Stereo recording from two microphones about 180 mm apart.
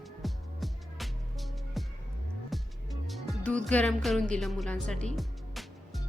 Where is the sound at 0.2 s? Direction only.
Centre (ahead or behind).